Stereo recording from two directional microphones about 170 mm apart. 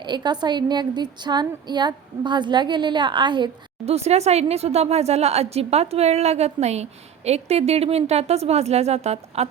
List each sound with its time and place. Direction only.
0.0 s a woman's voice: 25° right (ahead or behind)
3.9 s a woman's voice: 40° right (ahead or behind)